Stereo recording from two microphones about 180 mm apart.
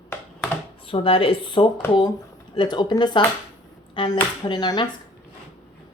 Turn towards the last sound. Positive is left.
turn(degrees=25)  # may be behind; listen again after turning